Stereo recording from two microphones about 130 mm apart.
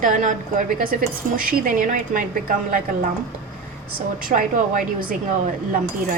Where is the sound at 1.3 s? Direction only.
90° right.